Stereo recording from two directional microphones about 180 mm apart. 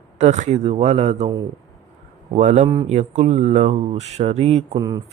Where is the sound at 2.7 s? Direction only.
30° right (ahead or behind).